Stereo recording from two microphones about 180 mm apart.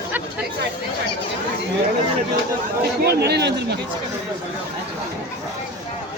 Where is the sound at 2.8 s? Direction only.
65° right (ahead or behind).